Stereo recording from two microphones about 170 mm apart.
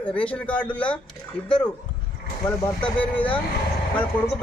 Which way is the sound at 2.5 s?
10° left (ahead or behind).